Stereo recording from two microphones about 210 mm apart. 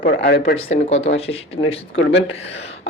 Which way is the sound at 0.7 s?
30° left (ahead or behind).